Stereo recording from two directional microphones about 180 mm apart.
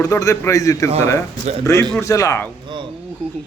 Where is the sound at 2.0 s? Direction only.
15° left (ahead or behind).